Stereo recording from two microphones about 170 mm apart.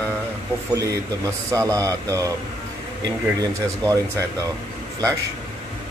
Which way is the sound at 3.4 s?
20° right (ahead or behind).